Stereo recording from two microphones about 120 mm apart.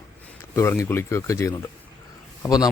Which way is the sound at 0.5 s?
20° left (ahead or behind).